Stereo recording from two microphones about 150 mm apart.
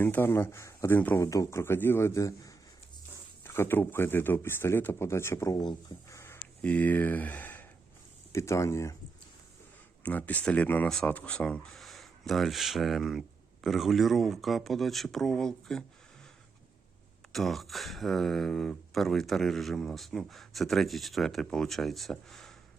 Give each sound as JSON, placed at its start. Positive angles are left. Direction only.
{"t": 0.0, "sound": "speech", "side_deg": 15}
{"t": 10.0, "sound": "speech", "side_deg": 10}
{"t": 17.3, "sound": "speech", "side_deg": 0}